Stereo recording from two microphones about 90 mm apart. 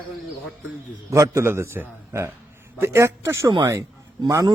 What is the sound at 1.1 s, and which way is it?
A man's voice, 35° right (ahead or behind).